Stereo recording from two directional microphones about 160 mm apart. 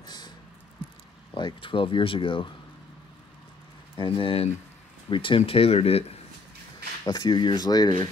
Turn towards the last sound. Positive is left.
turn(degrees=25)  # may be behind; listen again after turning